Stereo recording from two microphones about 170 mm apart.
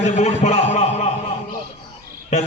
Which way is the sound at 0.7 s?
40° left (ahead or behind).